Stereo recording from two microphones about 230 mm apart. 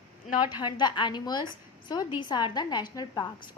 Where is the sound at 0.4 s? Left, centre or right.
Centre.